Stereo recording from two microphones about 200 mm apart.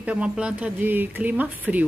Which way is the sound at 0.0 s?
5° right (ahead or behind).